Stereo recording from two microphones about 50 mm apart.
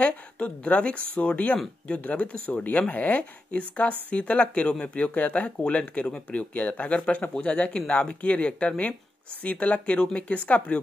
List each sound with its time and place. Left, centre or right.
0.0 s speech: left